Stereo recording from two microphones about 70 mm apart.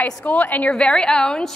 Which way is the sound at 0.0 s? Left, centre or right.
Left.